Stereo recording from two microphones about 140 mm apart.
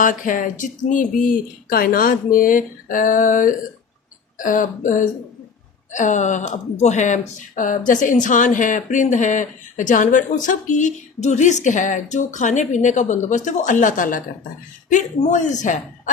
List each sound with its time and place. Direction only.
0.0 s speech: 70° left (ahead or behind)